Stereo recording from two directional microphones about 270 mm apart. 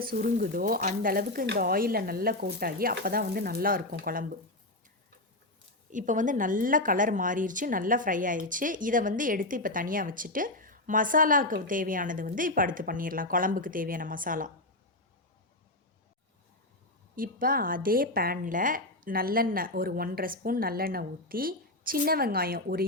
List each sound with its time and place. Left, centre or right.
0.0 s speech: right
5.9 s a woman's voice: right
17.2 s speech: right